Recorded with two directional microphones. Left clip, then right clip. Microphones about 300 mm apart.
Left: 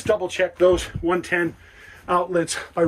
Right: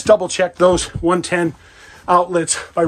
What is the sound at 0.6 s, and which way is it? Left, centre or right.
Speech, centre.